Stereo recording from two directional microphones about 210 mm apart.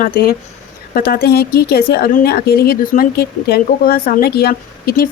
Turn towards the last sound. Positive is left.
turn(degrees=50)  # may be behind; listen again after turning